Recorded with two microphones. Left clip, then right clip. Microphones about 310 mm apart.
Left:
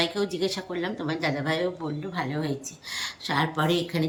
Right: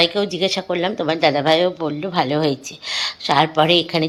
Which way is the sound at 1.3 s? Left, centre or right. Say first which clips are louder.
Right 12 dB; right.